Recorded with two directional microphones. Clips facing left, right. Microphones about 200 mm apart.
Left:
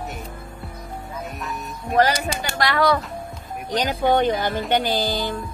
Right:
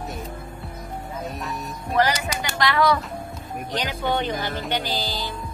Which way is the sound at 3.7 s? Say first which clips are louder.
Left 6 dB; 45° left (ahead or behind).